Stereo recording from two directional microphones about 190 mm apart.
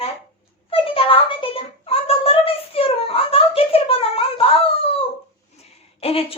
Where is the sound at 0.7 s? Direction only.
30° left (ahead or behind).